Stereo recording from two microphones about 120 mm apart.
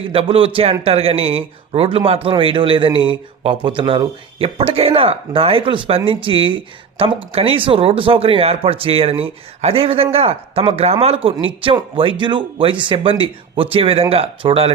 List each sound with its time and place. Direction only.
0.1 s a man's voice: 50° right (ahead or behind)